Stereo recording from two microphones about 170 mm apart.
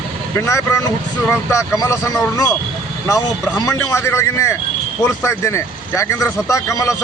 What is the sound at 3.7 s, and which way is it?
A man's voice, 20° left (ahead or behind).